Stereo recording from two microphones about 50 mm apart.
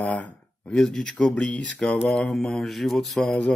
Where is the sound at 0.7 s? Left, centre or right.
Centre.